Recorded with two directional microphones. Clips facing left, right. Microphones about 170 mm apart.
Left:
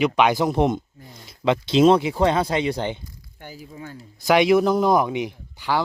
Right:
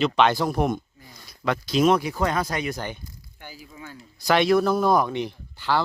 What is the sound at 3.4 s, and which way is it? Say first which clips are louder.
Speech: left 4 dB; 40° left (ahead or behind).